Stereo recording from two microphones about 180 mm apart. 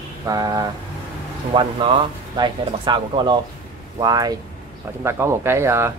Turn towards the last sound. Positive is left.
turn(degrees=-15)  # may be behind; listen again after turning